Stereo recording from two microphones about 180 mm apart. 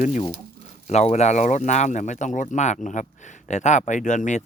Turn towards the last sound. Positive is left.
turn(degrees=40)  # may be behind; listen again after turning